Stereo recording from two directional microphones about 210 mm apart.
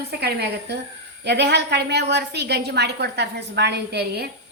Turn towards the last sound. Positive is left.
turn(degrees=-50)  # may be behind; listen again after turning